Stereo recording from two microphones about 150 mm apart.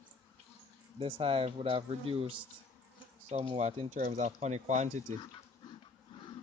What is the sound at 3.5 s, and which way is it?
Speech, 40° right (ahead or behind).